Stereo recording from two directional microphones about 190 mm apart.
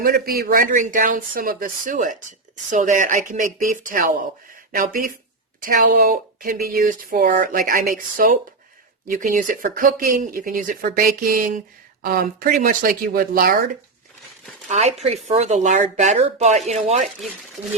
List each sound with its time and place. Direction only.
0.0 s speech: 50° right (ahead or behind)
14.7 s speech: 35° right (ahead or behind)